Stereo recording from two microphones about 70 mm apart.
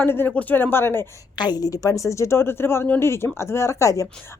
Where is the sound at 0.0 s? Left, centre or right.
Left.